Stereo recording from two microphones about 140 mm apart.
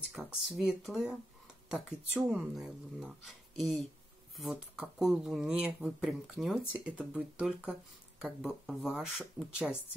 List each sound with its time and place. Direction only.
0.1 s speech: 5° right (ahead or behind)